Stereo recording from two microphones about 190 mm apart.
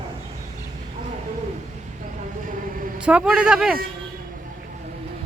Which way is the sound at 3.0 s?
5° right (ahead or behind).